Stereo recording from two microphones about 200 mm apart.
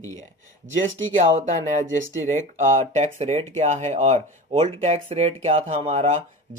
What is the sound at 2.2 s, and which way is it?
Speech, 40° right (ahead or behind).